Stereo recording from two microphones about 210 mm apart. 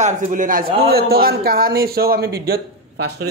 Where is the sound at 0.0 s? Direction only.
40° right (ahead or behind).